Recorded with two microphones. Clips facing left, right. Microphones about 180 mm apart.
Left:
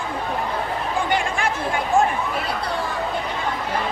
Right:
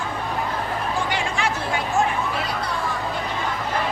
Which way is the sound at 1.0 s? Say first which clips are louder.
Left 2 dB; 50° left (ahead or behind).